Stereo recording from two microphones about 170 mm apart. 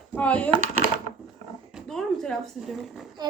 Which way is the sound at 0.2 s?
10° left (ahead or behind).